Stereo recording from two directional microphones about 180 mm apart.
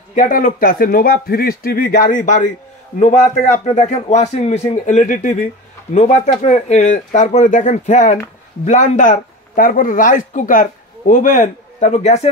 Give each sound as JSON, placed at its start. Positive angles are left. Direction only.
{"t": 0.1, "sound": "speech", "side_deg": 45}